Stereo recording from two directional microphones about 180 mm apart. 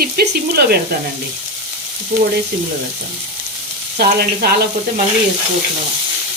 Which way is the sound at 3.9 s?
60° right (ahead or behind).